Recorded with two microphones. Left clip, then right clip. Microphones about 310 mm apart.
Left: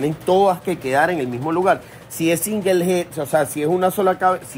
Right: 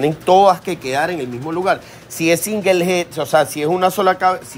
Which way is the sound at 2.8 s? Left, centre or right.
Right.